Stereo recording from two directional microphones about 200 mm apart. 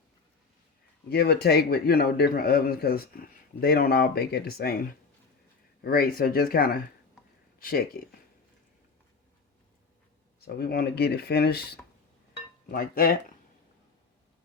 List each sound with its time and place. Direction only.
1.1 s a man's voice: 55° left (ahead or behind)
5.8 s a man's voice: 50° left (ahead or behind)
10.4 s a man's voice: 50° left (ahead or behind)